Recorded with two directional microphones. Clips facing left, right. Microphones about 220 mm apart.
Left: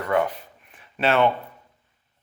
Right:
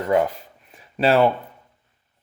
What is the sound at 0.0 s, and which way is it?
Speech, 30° right (ahead or behind).